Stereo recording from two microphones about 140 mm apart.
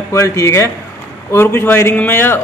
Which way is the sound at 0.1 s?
20° left (ahead or behind).